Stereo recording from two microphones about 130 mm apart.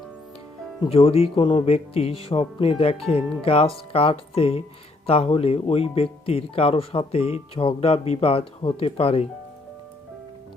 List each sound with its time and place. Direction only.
0.9 s speech: 50° left (ahead or behind)